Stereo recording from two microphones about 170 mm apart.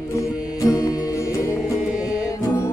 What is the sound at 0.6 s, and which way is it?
Music, 20° left (ahead or behind).